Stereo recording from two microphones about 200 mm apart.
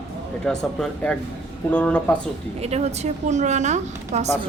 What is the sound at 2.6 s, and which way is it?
A woman's voice, 30° right (ahead or behind).